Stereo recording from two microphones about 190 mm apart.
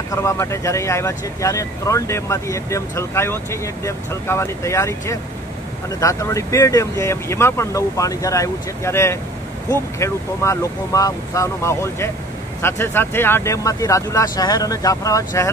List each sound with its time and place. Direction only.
0.1 s speech: 15° left (ahead or behind)